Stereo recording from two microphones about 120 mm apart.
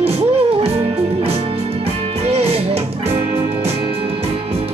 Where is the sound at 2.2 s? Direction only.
55° right (ahead or behind).